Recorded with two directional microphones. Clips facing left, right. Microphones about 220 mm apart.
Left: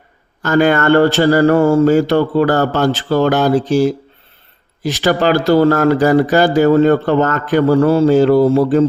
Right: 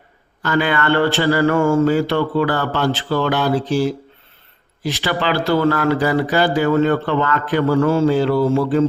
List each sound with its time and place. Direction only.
0.4 s speech: 45° left (ahead or behind)